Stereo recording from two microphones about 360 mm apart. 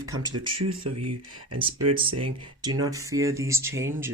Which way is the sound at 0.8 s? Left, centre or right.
Right.